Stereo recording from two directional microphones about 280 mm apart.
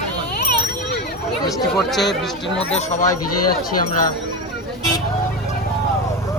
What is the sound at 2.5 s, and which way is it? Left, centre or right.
Speech, left.